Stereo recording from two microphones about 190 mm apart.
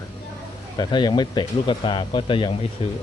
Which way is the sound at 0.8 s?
25° left (ahead or behind).